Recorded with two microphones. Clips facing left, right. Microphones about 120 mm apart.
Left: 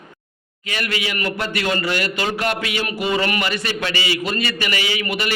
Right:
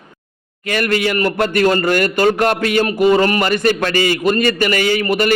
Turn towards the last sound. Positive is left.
turn(degrees=-45)  # may be behind; listen again after turning